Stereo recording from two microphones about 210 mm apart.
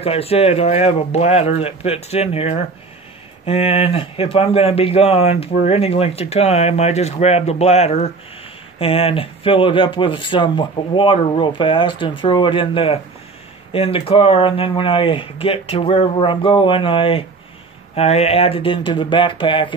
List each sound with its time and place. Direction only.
0.0 s speech: 30° left (ahead or behind)